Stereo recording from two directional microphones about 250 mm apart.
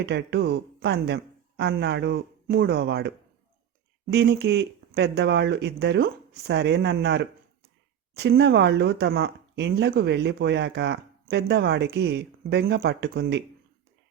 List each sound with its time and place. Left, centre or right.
0.0 s speech: right